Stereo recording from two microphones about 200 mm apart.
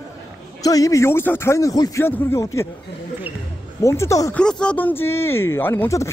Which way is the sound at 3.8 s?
15° left (ahead or behind).